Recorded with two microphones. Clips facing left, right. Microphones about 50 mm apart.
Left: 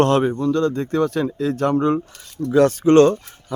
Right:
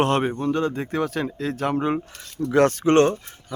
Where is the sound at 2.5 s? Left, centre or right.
Right.